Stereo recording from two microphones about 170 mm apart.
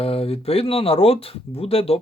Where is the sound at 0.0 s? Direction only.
35° left (ahead or behind).